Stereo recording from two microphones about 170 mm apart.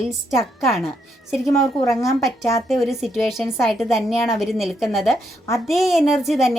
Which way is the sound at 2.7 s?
Centre (ahead or behind).